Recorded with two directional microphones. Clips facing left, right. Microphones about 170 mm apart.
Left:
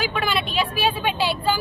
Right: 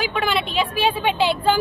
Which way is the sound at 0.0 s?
20° right (ahead or behind).